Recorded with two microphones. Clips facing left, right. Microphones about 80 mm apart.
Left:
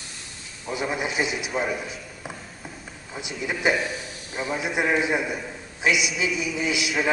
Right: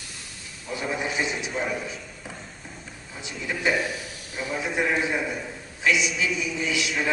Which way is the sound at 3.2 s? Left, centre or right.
Centre.